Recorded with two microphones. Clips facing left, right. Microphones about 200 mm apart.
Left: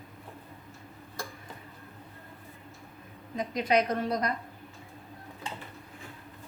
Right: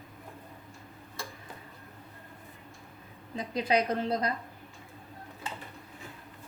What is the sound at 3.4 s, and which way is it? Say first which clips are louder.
Speech: left 2 dB; 30° right (ahead or behind).